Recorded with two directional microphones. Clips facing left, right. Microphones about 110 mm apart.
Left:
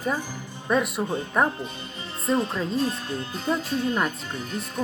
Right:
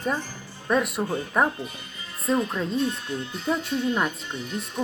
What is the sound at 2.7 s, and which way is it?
Speech, 40° left (ahead or behind).